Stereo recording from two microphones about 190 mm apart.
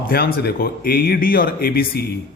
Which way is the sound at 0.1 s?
55° left (ahead or behind).